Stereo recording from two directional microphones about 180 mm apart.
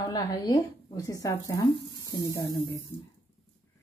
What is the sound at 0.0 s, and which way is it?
Speech, 20° left (ahead or behind).